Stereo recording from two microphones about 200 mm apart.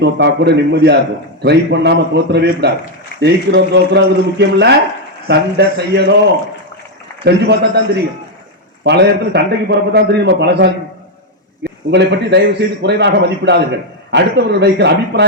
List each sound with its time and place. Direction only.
0.0 s a man's voice: 55° right (ahead or behind)
7.3 s a man's voice: 55° right (ahead or behind)
8.8 s a man's voice: 55° right (ahead or behind)